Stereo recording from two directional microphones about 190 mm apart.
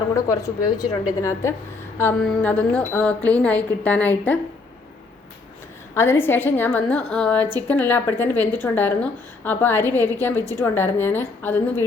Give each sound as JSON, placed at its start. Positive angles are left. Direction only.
{"t": 0.1, "sound": "a woman's voice", "side_deg": 15}
{"t": 5.9, "sound": "speech", "side_deg": 15}